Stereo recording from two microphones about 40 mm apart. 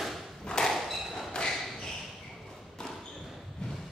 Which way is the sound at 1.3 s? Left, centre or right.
Left.